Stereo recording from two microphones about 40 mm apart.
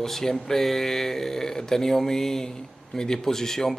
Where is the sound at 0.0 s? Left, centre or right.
Centre.